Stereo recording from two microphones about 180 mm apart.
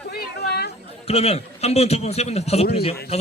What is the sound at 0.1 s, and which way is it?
Chatter, 65° left (ahead or behind).